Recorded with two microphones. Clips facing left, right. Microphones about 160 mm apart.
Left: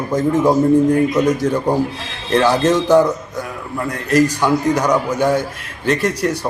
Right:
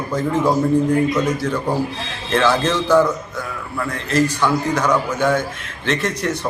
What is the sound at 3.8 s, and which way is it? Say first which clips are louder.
Speech: left 4 dB; 40° left (ahead or behind).